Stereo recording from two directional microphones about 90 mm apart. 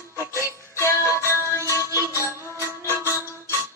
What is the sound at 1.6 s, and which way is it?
Music, 35° right (ahead or behind).